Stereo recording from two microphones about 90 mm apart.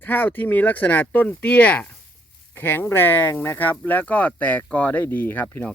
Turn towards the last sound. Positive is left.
turn(degrees=25)  # may be behind; listen again after turning